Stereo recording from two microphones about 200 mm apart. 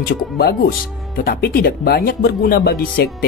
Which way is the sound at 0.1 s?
50° left (ahead or behind).